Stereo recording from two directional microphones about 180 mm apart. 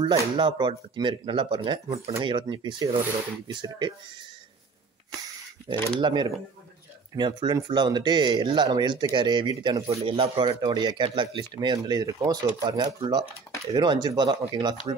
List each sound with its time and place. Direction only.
0.0 s speech: 30° right (ahead or behind)
5.7 s speech: 25° right (ahead or behind)